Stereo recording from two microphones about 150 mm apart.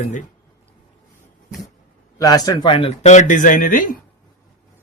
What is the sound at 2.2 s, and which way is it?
Speech, 25° left (ahead or behind).